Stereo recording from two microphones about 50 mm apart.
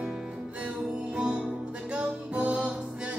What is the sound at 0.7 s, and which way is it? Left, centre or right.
Music, centre.